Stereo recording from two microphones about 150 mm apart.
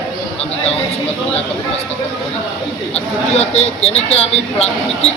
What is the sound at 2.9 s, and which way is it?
Speech, 45° left (ahead or behind).